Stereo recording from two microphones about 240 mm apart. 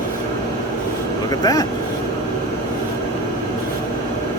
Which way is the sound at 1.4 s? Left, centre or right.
Centre.